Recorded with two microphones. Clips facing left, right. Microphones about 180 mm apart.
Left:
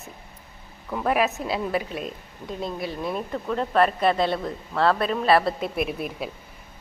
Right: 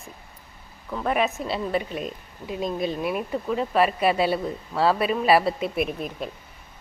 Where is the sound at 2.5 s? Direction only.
15° right (ahead or behind).